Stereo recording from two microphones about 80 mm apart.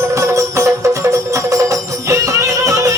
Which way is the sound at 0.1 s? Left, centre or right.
Right.